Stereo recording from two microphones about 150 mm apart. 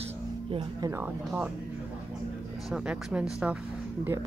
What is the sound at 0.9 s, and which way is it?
Speech, 15° right (ahead or behind).